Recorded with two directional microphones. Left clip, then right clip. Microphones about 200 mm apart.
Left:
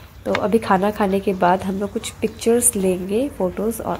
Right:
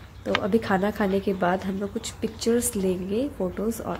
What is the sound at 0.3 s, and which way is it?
A woman's voice, centre (ahead or behind).